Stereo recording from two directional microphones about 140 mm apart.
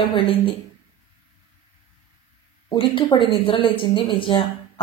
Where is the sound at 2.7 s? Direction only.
35° left (ahead or behind).